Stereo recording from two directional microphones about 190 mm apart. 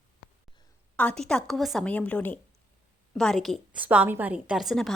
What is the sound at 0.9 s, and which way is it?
A woman's voice, 5° left (ahead or behind).